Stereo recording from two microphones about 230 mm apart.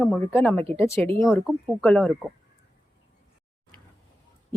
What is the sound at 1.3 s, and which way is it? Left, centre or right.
Speech, centre.